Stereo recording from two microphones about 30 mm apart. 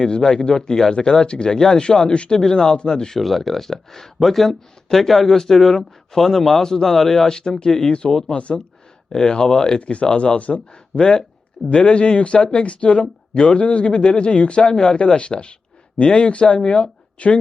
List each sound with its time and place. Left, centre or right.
0.0 s speech: left
1.5 s speech: centre
1.7 s speech: left
3.2 s speech: centre
7.3 s speech: left
8.3 s speech: left
9.0 s speech: left
9.8 s speech: left
14.0 s speech: left
17.2 s speech: left